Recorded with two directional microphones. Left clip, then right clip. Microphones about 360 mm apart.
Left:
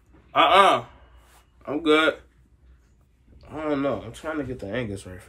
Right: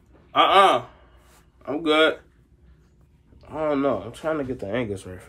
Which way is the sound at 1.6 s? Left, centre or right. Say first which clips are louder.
Right 1 dB; centre.